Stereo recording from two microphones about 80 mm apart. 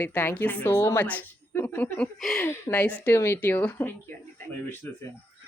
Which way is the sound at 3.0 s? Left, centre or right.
Left.